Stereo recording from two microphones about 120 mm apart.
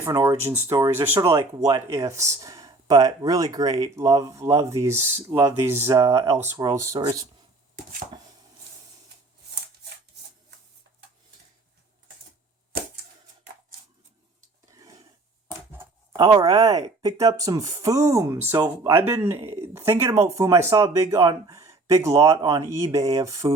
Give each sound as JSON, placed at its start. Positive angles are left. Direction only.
{"t": 0.0, "sound": "speech", "side_deg": -25}
{"t": 14.8, "sound": "a sound", "side_deg": -30}
{"t": 16.1, "sound": "speech", "side_deg": -35}